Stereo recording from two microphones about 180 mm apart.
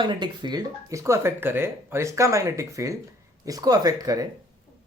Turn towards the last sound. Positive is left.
turn(degrees=-20)  # may be behind; listen again after turning